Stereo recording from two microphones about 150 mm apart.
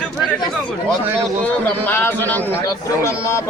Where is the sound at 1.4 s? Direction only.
10° left (ahead or behind).